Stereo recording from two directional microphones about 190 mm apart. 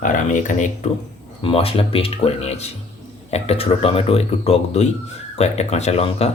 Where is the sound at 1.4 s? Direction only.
30° left (ahead or behind).